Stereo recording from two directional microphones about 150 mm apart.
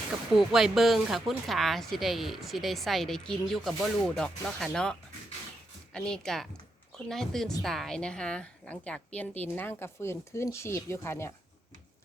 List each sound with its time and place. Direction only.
0.3 s speech: centre (ahead or behind); by 11.3 s 15° left (ahead or behind)